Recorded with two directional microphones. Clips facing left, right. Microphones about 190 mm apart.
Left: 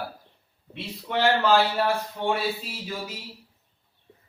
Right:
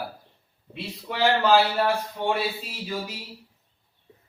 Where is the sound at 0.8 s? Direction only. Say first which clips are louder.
Even; centre (ahead or behind).